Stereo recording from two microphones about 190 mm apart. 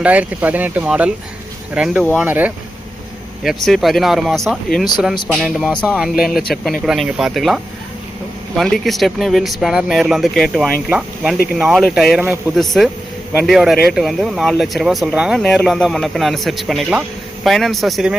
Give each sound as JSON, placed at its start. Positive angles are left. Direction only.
{"t": 0.0, "sound": "speech", "side_deg": -5}